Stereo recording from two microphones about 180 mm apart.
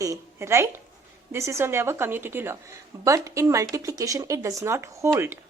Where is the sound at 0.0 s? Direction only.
15° right (ahead or behind).